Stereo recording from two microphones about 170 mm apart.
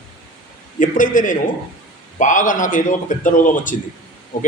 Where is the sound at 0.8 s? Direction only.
50° left (ahead or behind).